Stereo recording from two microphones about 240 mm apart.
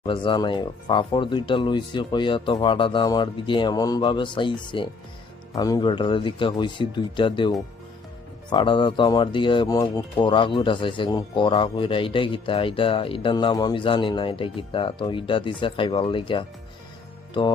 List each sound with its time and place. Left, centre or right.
0.0 s speech: left